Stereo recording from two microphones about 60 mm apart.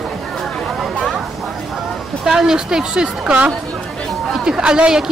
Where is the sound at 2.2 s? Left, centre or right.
Centre.